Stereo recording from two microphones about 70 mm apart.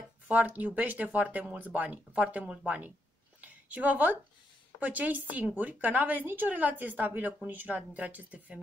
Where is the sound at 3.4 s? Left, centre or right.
Right.